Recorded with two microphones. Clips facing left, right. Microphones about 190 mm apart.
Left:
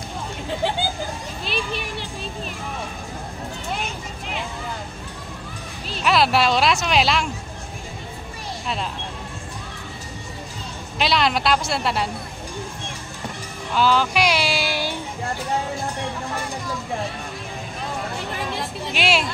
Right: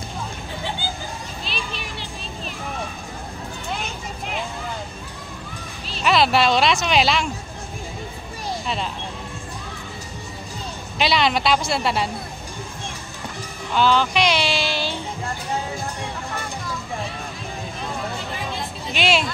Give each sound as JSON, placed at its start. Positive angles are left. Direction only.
{"t": 1.4, "sound": "children playing", "side_deg": 55}
{"t": 6.0, "sound": "speech", "side_deg": 0}
{"t": 11.0, "sound": "speech", "side_deg": 0}
{"t": 13.7, "sound": "speech", "side_deg": 5}
{"t": 18.9, "sound": "speech", "side_deg": 5}